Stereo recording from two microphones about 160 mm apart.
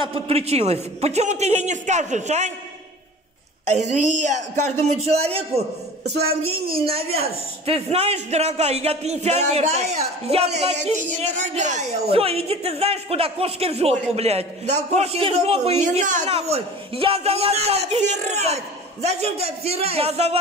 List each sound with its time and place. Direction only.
0.1 s a man's voice: 40° right (ahead or behind)
3.7 s a man's voice: 45° right (ahead or behind)
6.0 s a woman's voice: 85° right
6.7 s a man's voice: 35° right (ahead or behind)